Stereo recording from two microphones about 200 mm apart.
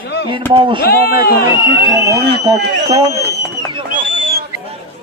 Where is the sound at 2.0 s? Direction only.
55° right (ahead or behind).